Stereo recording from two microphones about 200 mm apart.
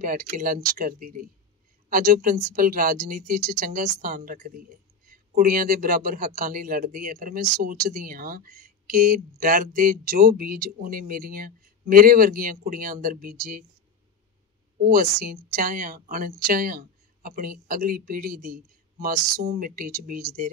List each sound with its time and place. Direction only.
0.0 s speech: 45° right (ahead or behind)
14.8 s speech: 45° right (ahead or behind)